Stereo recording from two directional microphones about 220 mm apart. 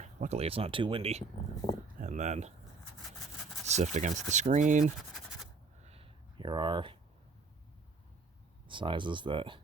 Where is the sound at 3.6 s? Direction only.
30° right (ahead or behind).